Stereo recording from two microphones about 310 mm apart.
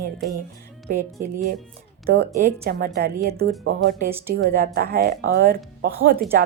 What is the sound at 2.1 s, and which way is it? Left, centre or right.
A woman's voice, right.